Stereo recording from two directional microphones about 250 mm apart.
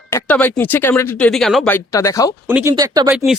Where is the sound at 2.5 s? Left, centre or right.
Centre.